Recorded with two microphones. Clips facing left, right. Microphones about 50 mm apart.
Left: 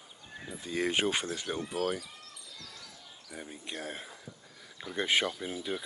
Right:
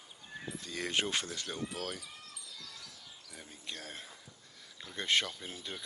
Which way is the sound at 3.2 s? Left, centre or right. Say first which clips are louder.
Left 5 dB; centre.